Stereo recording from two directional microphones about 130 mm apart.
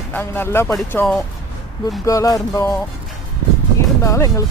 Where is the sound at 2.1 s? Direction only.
25° left (ahead or behind).